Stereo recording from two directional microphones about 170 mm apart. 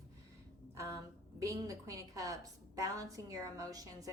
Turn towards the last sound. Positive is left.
turn(degrees=-20)  # may be behind; listen again after turning